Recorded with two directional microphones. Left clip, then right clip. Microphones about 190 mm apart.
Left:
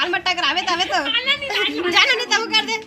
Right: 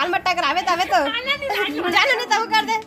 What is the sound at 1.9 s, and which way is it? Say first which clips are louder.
Speech: left 1 dB; 70° right (ahead or behind).